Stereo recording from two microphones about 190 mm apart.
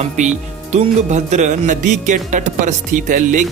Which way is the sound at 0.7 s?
40° right (ahead or behind).